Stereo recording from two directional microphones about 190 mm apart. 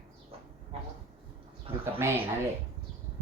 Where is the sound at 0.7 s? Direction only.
30° right (ahead or behind).